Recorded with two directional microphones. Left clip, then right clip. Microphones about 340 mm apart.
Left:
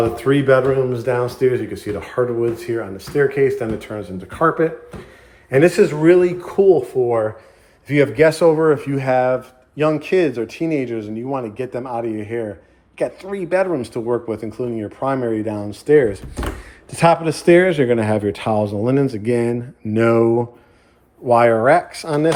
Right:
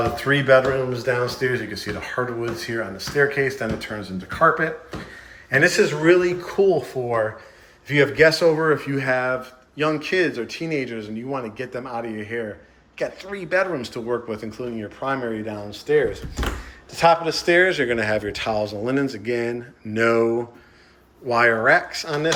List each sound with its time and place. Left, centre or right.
0.2 s speech: centre